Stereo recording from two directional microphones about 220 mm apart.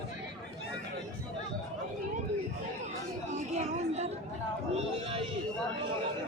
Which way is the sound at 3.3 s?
30° right (ahead or behind).